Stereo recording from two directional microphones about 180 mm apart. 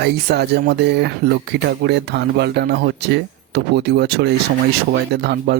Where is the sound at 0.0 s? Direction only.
70° right (ahead or behind).